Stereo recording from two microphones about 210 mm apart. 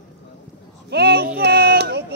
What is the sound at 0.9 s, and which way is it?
Child singing, 50° right (ahead or behind).